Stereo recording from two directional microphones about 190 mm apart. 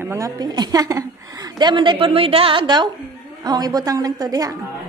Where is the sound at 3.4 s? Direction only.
20° right (ahead or behind).